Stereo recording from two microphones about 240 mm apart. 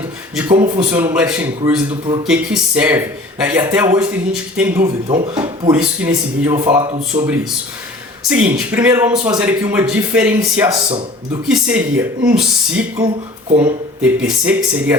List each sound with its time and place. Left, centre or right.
0.4 s speech: centre
1.9 s speech: centre
2.2 s speech: centre
4.8 s speech: right
5.7 s speech: centre
14.0 s speech: centre